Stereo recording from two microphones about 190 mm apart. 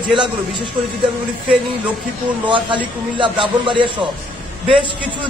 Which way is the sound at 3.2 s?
25° right (ahead or behind).